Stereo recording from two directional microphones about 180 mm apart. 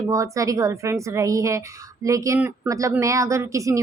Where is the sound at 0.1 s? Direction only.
20° right (ahead or behind).